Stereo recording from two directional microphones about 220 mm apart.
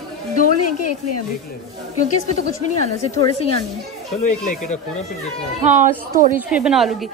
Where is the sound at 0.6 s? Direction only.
90° left.